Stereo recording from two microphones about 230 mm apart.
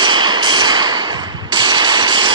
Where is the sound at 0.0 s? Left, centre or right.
Centre.